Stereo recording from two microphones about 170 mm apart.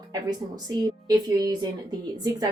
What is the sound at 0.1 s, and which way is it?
Speech, 20° right (ahead or behind).